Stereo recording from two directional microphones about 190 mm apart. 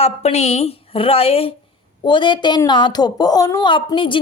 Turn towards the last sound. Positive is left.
turn(degrees=25)  # may be behind; listen again after turning